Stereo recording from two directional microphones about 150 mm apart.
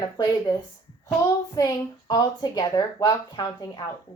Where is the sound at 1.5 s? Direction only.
25° left (ahead or behind).